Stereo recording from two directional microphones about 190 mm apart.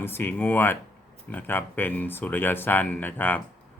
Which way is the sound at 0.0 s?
10° left (ahead or behind).